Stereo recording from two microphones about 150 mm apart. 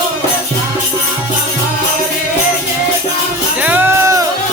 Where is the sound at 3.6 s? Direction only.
15° right (ahead or behind).